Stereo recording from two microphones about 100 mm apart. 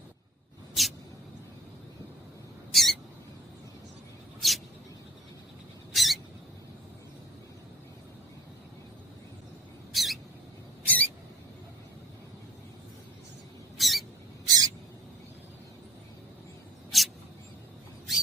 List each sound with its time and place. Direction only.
0.7 s a sound: centre (ahead or behind)
2.7 s rodents: centre (ahead or behind)
4.4 s a sound: centre (ahead or behind)
5.9 s rodents: centre (ahead or behind)
9.9 s rodents: centre (ahead or behind)
10.8 s rodents: 15° left (ahead or behind)
13.7 s a sound: centre (ahead or behind)
14.4 s owl: 40° right (ahead or behind)
16.9 s mouse: centre (ahead or behind)